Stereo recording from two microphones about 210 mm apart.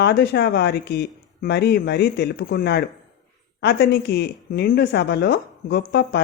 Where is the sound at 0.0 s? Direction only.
50° left (ahead or behind).